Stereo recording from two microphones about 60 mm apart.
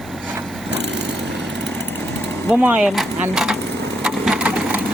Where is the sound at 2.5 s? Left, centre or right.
Right.